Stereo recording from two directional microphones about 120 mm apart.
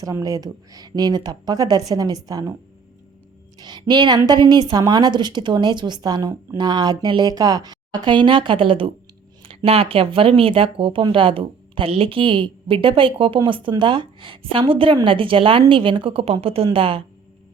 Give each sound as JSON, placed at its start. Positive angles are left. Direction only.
{"t": 0.0, "sound": "a woman's voice", "side_deg": -30}
{"t": 3.6, "sound": "a woman's voice", "side_deg": -35}